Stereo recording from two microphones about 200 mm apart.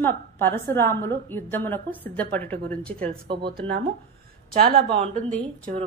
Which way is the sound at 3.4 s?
50° right (ahead or behind).